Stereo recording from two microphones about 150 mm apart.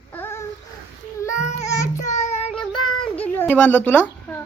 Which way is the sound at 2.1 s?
50° left (ahead or behind).